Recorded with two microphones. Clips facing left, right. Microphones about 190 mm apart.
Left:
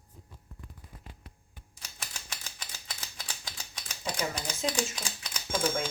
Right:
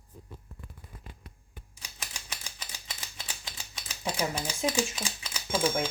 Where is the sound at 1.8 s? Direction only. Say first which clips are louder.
Even; 10° right (ahead or behind).